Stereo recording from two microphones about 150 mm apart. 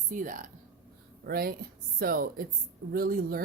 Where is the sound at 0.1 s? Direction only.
60° right (ahead or behind).